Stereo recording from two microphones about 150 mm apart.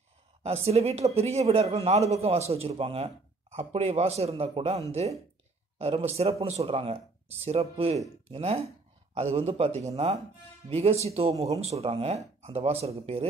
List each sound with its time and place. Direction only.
0.4 s speech: 45° right (ahead or behind)